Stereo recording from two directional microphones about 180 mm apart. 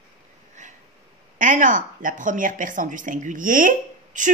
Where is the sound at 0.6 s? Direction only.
40° right (ahead or behind).